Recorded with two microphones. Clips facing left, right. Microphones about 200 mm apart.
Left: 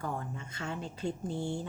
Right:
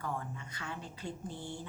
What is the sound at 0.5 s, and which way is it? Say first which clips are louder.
Speech: left 6 dB; 25° left (ahead or behind).